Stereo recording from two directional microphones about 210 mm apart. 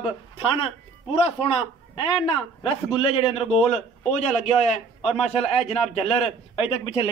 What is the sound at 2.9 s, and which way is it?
A man's voice, 25° left (ahead or behind).